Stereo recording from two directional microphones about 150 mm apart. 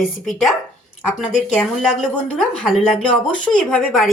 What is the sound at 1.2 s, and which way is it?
Speech, 5° left (ahead or behind).